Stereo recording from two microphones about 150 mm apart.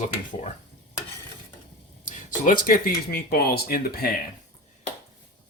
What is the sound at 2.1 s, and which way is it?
Speech, 60° left (ahead or behind).